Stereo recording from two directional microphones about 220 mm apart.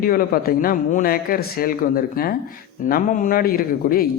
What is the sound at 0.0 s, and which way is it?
A man's voice, 40° left (ahead or behind).